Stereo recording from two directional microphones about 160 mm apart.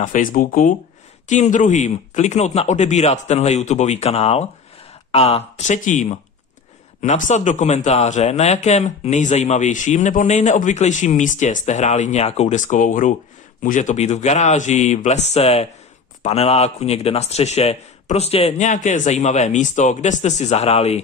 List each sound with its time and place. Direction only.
0.0 s speech: 55° left (ahead or behind)
1.2 s speech: 50° left (ahead or behind)